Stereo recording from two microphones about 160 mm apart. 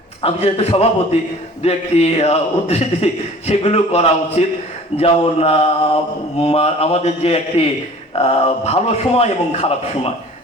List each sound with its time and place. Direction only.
0.2 s speech: 40° left (ahead or behind)